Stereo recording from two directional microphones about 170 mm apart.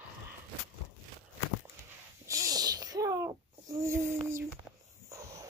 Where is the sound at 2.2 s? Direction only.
20° right (ahead or behind).